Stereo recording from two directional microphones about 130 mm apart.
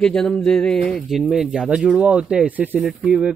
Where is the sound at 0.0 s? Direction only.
5° left (ahead or behind).